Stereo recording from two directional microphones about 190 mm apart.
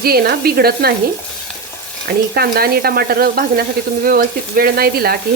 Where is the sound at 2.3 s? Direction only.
55° right (ahead or behind).